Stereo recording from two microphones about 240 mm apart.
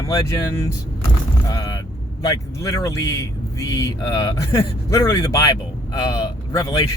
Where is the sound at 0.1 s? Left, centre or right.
Centre.